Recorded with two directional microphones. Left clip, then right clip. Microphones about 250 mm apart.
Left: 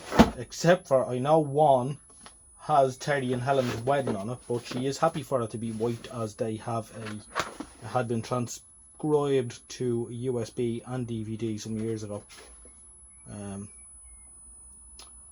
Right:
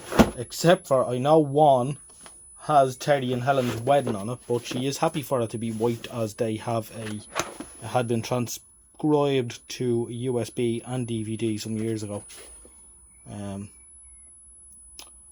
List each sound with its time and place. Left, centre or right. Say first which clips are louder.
0.3 s speech: right 3 dB; right
13.2 s speech: right 4 dB; right